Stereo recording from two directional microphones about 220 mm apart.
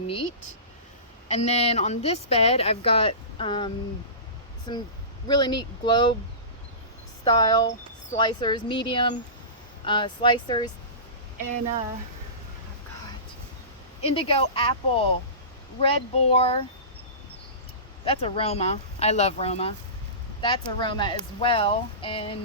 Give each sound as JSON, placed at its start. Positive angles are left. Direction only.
{"t": 1.3, "sound": "speech", "side_deg": 30}
{"t": 7.3, "sound": "speech", "side_deg": 20}
{"t": 14.0, "sound": "speech", "side_deg": 25}
{"t": 18.0, "sound": "speech", "side_deg": 25}